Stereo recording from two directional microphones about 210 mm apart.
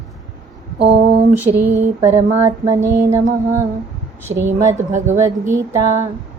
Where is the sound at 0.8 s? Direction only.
55° right (ahead or behind).